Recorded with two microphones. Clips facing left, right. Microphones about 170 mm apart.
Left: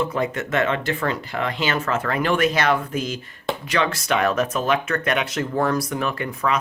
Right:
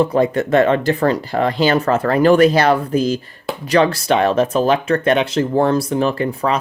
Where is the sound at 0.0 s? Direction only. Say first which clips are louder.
Right 8 dB; 35° right (ahead or behind).